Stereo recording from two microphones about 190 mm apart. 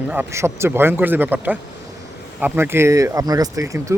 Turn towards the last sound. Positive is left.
turn(degrees=-15)  # may be behind; listen again after turning